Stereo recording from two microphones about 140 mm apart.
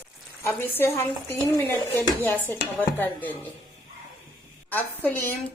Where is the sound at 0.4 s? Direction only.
15° left (ahead or behind).